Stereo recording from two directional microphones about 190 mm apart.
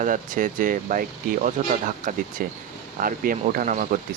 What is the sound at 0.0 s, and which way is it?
Speech, 45° right (ahead or behind).